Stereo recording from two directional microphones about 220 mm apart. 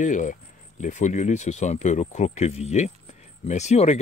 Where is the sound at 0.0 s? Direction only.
35° left (ahead or behind).